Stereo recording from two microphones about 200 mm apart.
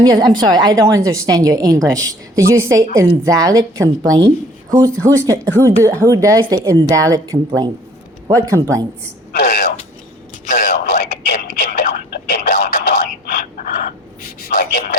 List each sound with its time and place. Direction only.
0.0 s a woman's voice: 20° right (ahead or behind)
5.5 s speech: 10° left (ahead or behind)
5.8 s a woman's voice: 15° right (ahead or behind)
9.3 s a sound: 50° left (ahead or behind)